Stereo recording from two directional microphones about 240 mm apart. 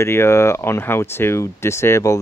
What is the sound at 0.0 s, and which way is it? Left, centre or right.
Speech, centre.